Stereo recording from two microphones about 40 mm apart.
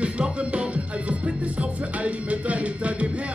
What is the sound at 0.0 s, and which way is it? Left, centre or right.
Music, right.